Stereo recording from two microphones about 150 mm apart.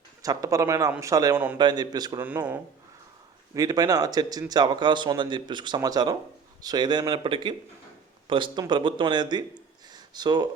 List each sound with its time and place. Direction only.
0.2 s speech: 25° right (ahead or behind)
2.2 s speech: 10° right (ahead or behind)
3.5 s speech: 25° right (ahead or behind)
9.9 s a sound: 30° right (ahead or behind)